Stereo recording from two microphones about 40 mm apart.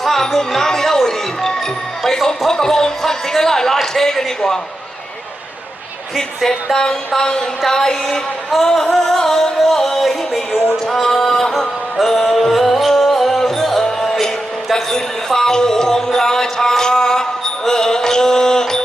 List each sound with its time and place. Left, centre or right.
0.0 s speech: centre
4.4 s music: centre
7.6 s music: centre
8.5 s music: centre
8.9 s music: centre